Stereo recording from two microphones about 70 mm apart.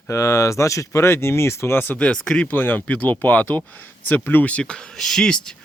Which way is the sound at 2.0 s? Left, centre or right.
Centre.